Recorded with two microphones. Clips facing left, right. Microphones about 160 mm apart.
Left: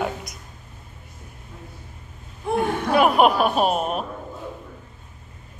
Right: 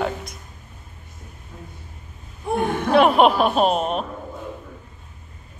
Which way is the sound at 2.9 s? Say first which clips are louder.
Right 2 dB; 5° left (ahead or behind).